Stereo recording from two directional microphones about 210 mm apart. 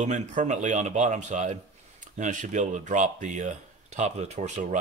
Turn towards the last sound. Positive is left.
turn(degrees=-35)  # may be behind; listen again after turning